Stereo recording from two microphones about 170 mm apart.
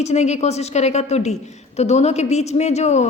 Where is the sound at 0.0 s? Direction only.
40° left (ahead or behind).